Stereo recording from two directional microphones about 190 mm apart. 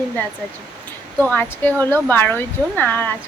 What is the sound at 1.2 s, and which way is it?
A woman's voice, 10° left (ahead or behind).